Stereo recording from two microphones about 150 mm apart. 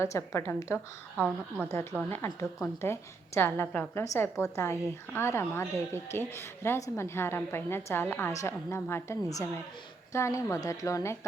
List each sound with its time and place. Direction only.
0.0 s a woman's voice: 20° left (ahead or behind)
1.1 s a woman's voice: 10° right (ahead or behind)
1.7 s a woman's voice: 15° left (ahead or behind)